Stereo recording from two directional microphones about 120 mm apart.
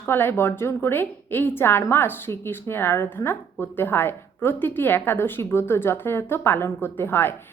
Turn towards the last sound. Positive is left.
turn(degrees=20)  # may be behind; listen again after turning